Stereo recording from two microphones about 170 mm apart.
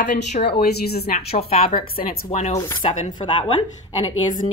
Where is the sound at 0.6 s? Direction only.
70° left (ahead or behind).